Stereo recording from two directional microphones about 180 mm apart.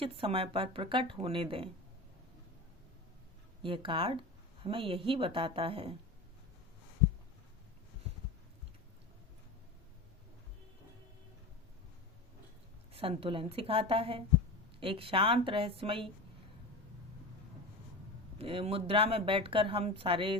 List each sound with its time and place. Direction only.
0.0 s speech: 30° right (ahead or behind)
3.6 s speech: 30° right (ahead or behind)
12.9 s speech: 30° right (ahead or behind)
18.3 s speech: 30° right (ahead or behind)